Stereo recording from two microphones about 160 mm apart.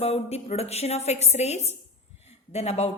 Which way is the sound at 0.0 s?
40° left (ahead or behind).